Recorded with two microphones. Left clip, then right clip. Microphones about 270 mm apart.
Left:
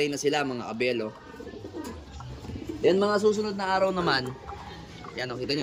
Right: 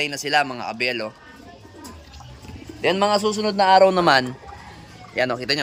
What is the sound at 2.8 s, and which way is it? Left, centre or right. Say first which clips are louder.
Speech: right 4 dB; right.